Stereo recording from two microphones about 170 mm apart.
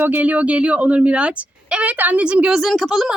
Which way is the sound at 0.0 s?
10° right (ahead or behind).